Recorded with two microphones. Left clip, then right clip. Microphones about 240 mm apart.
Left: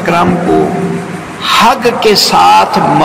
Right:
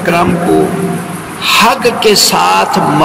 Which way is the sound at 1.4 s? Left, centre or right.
Right.